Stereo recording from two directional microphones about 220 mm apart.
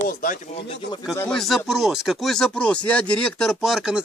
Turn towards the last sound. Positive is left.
turn(degrees=-5)  # may be behind; listen again after turning